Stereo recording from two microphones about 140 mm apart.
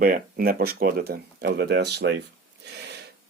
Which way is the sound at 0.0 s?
90° right.